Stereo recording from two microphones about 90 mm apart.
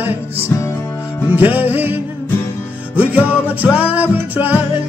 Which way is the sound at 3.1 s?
15° right (ahead or behind).